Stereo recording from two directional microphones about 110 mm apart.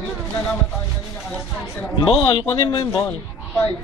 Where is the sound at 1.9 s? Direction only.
45° left (ahead or behind).